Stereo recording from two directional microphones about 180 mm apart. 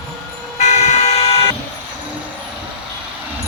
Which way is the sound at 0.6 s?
40° left (ahead or behind).